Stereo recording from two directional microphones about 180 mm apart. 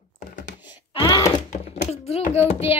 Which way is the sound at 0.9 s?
25° left (ahead or behind).